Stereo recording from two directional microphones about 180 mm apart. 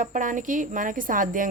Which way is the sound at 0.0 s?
45° right (ahead or behind).